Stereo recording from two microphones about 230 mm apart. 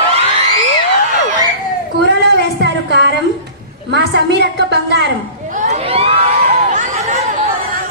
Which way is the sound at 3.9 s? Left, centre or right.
Right.